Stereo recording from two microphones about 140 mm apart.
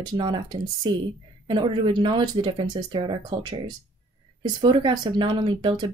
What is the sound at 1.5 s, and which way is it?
Speech, 35° right (ahead or behind).